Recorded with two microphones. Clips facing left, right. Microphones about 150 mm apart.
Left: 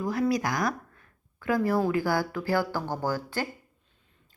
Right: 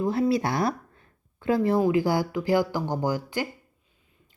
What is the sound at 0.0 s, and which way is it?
Speech, 25° right (ahead or behind).